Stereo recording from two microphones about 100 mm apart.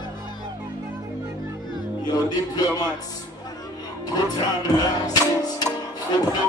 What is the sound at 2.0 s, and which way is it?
Music, 45° left (ahead or behind).